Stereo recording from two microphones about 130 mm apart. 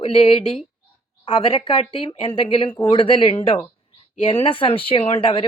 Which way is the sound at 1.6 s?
40° left (ahead or behind).